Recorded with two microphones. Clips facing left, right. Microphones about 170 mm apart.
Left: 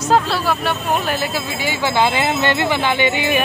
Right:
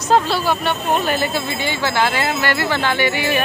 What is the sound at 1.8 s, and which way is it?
Speech, 20° left (ahead or behind).